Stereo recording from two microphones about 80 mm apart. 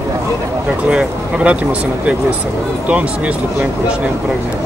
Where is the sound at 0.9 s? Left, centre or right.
Centre.